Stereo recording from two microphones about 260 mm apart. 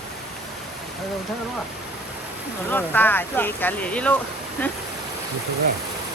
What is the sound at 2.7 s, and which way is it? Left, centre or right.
Speech, centre.